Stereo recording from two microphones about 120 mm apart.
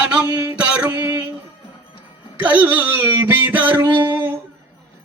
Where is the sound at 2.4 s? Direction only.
15° right (ahead or behind).